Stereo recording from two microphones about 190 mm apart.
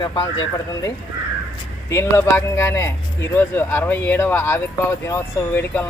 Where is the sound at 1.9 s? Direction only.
15° left (ahead or behind).